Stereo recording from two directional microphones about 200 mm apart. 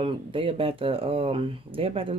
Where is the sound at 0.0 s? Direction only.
25° right (ahead or behind).